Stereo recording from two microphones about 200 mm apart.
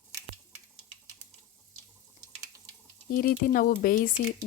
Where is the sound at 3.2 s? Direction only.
45° left (ahead or behind).